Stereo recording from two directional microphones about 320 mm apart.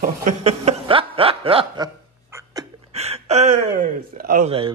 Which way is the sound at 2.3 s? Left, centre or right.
Centre.